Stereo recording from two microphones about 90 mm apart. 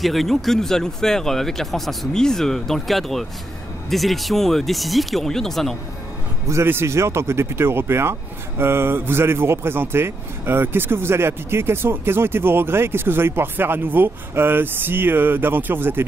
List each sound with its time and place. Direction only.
0.0 s speech: centre (ahead or behind)
6.4 s speech: 30° right (ahead or behind)